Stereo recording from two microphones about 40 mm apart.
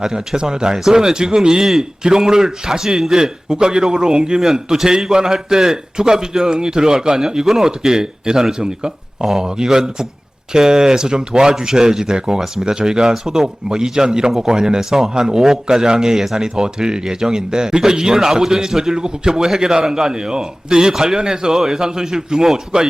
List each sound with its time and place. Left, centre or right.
0.0 s a man's voice: centre